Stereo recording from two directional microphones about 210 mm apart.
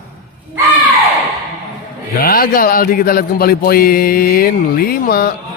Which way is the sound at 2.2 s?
45° left (ahead or behind).